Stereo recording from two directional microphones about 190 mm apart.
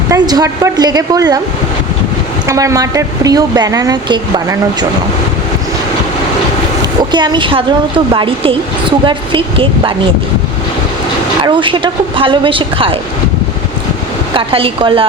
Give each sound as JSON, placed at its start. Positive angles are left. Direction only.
{"t": 0.1, "sound": "a woman's voice", "side_deg": -20}
{"t": 2.5, "sound": "speech", "side_deg": -15}
{"t": 7.1, "sound": "a woman's voice", "side_deg": -25}
{"t": 11.4, "sound": "a woman's voice", "side_deg": -25}
{"t": 14.3, "sound": "a woman's voice", "side_deg": -30}